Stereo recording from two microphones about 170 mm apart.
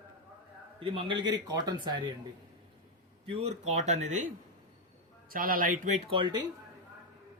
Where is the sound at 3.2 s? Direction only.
35° right (ahead or behind).